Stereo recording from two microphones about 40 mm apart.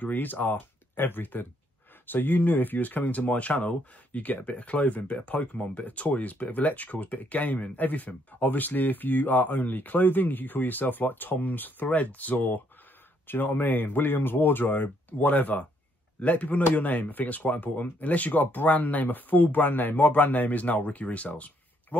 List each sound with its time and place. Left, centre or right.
0.0 s speech: left
11.9 s speech: left
13.3 s a man's voice: left